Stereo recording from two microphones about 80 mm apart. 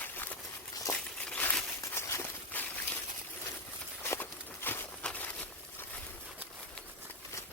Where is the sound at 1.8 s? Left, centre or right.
Left.